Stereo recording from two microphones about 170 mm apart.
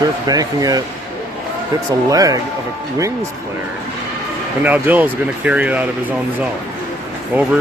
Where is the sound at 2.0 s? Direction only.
20° right (ahead or behind).